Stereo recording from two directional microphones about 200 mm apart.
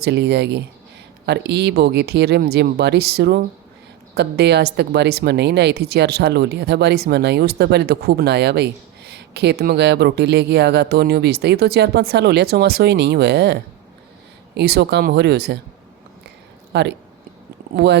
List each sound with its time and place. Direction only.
0.0 s speech: 55° right (ahead or behind)
16.7 s speech: 60° right (ahead or behind)